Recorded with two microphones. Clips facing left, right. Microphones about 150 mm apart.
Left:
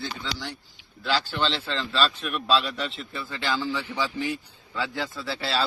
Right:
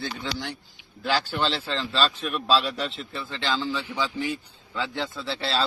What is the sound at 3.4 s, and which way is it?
Speech, 10° left (ahead or behind).